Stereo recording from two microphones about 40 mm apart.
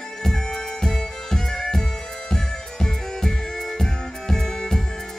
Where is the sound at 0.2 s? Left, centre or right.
Centre.